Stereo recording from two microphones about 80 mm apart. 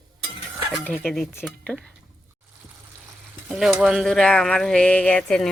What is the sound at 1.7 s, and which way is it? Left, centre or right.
Speech, centre.